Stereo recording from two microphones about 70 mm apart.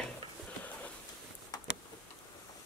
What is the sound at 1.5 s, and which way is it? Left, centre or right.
Tick-tock, left.